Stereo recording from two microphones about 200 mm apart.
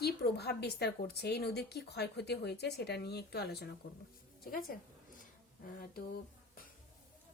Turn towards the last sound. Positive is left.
turn(degrees=50)  # may be behind; listen again after turning